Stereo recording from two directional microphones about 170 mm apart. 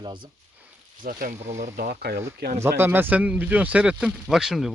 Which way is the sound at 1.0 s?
55° right (ahead or behind).